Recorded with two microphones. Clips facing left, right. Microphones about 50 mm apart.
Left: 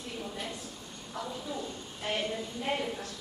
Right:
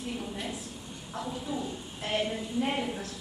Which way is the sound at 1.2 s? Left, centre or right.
Centre.